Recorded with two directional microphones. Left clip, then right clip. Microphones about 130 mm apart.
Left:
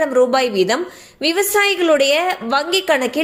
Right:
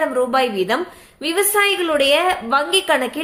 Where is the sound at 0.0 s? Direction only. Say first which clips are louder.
Left 3 dB; 30° left (ahead or behind).